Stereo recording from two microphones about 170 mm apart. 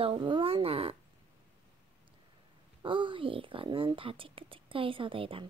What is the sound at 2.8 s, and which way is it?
A woman's voice, 30° right (ahead or behind).